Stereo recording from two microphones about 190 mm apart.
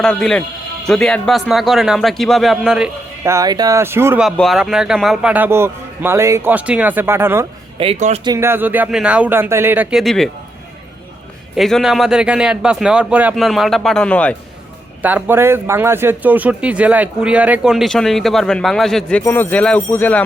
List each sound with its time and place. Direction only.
0.0 s speech: 5° left (ahead or behind)
3.2 s speech: 15° right (ahead or behind)
4.3 s speech: centre (ahead or behind)
7.8 s speech: 35° right (ahead or behind)
8.2 s speech: 15° right (ahead or behind); by 10.2 s centre (ahead or behind)
11.5 s speech: centre (ahead or behind)
15.0 s speech: 10° right (ahead or behind); by 20.2 s 10° left (ahead or behind)